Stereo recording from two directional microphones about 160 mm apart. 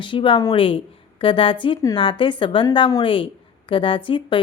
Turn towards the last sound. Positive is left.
turn(degrees=30)  # may be behind; listen again after turning